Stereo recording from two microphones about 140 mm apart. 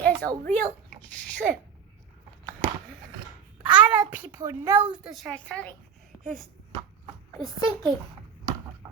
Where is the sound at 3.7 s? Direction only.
10° right (ahead or behind).